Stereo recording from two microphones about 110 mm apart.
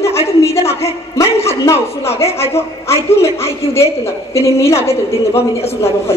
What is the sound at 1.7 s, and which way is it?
Speech, 70° left (ahead or behind).